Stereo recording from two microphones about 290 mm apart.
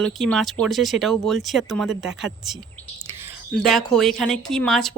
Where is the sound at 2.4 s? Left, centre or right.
Centre.